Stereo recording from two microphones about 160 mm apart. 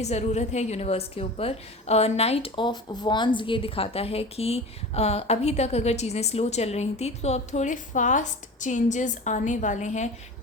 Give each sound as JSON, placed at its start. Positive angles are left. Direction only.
{"t": 0.0, "sound": "a woman's voice", "side_deg": 45}